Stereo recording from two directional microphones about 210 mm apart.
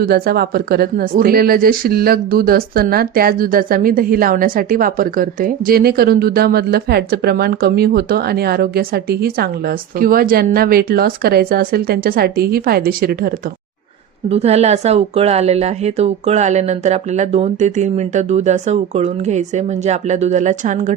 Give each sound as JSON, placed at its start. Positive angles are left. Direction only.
{"t": 0.0, "sound": "speech", "side_deg": -45}
{"t": 14.3, "sound": "speech", "side_deg": -30}